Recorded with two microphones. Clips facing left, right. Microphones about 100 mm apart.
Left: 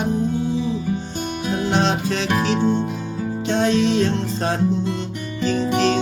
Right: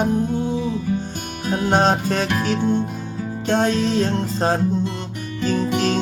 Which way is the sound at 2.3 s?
45° left (ahead or behind).